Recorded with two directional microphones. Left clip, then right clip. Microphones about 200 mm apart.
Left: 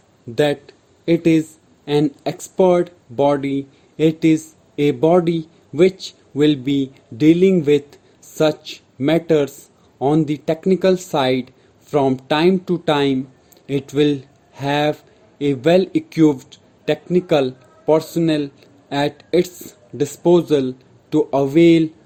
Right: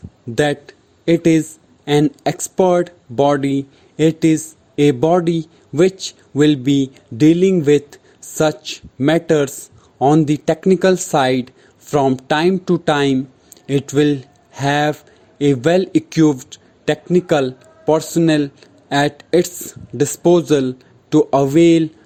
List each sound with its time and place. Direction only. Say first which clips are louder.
0.3 s speech: right 1 dB; 35° right (ahead or behind)